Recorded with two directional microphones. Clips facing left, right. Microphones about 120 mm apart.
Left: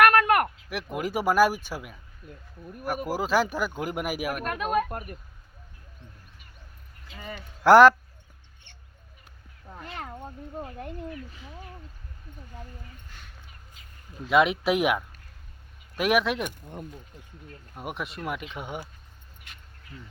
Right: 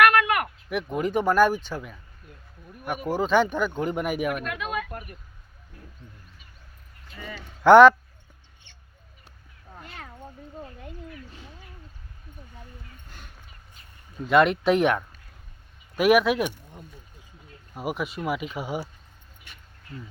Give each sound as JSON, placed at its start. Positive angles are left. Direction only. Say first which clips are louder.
{"t": 0.0, "sound": "a sound", "louder": "left 1 dB", "side_deg": 45}
{"t": 0.7, "sound": "speech", "louder": "right 4 dB", "side_deg": 0}
{"t": 4.4, "sound": "speech", "louder": "left 5 dB", "side_deg": 45}
{"t": 7.6, "sound": "speech", "louder": "right 2 dB", "side_deg": 5}
{"t": 14.3, "sound": "speech", "louder": "right 3 dB", "side_deg": 5}
{"t": 17.7, "sound": "speech", "louder": "right 5 dB", "side_deg": -5}